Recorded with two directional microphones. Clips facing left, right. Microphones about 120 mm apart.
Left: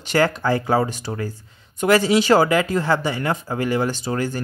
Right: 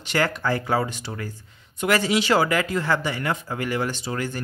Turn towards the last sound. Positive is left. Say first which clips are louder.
# left 5 dB
turn(degrees=35)  # may be behind; listen again after turning